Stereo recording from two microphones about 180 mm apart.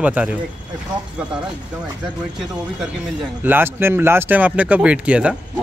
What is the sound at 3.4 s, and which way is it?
A man's voice, 10° right (ahead or behind).